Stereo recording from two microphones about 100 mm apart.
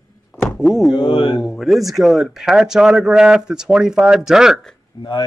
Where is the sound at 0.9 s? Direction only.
45° left (ahead or behind).